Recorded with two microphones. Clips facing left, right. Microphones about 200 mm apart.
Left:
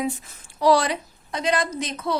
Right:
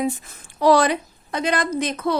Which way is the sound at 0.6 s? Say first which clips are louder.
Right 3 dB; 55° right (ahead or behind).